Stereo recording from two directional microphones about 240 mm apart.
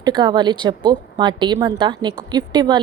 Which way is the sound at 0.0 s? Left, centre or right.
Centre.